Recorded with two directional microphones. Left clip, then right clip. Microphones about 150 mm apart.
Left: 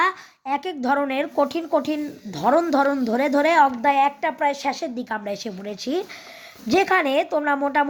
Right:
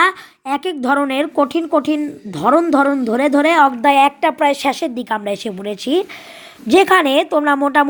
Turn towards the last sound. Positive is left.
turn(degrees=-25)  # may be behind; listen again after turning